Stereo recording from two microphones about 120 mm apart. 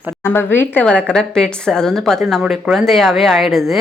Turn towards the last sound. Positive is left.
turn(degrees=0)  # may be behind; listen again after turning